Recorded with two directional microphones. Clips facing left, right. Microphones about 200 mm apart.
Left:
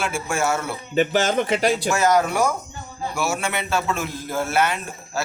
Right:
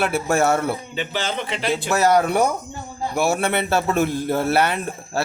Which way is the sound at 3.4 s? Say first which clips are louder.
Right 4 dB; 60° right (ahead or behind).